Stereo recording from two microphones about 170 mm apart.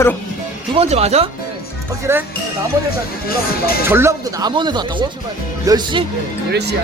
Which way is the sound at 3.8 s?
15° right (ahead or behind).